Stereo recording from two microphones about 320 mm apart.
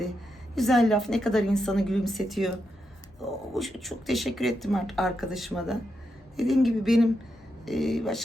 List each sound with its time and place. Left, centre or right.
0.5 s speech: centre